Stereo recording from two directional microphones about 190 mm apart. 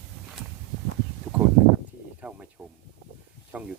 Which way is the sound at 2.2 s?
5° right (ahead or behind).